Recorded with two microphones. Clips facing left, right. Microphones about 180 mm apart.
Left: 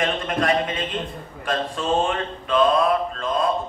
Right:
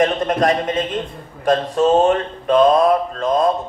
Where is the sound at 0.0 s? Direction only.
40° right (ahead or behind).